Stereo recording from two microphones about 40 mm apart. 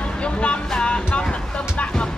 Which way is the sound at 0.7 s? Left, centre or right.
Left.